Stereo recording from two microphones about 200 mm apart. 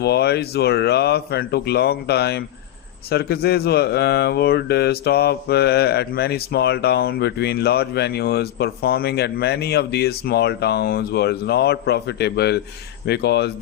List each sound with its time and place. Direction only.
0.0 s speech: 55° left (ahead or behind)